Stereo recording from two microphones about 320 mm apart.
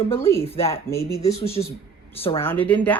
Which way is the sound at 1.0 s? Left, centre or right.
Left.